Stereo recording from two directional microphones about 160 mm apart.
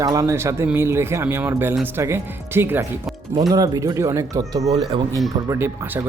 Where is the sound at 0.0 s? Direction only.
20° right (ahead or behind).